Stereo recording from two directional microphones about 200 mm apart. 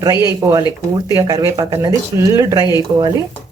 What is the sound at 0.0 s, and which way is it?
Speech, 20° right (ahead or behind).